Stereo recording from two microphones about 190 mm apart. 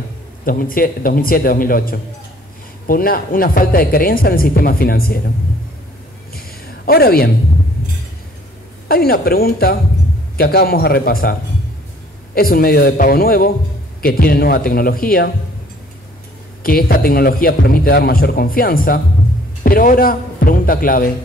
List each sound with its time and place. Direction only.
0.5 s a man's voice: 50° left (ahead or behind)
6.9 s a woman's voice: 55° left (ahead or behind)
8.8 s a man's voice: 55° left (ahead or behind)
12.4 s a man's voice: 50° left (ahead or behind)
16.6 s a man's voice: 50° left (ahead or behind)